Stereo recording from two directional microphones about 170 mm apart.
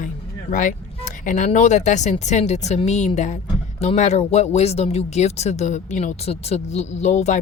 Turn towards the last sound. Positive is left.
turn(degrees=45)  # may be behind; listen again after turning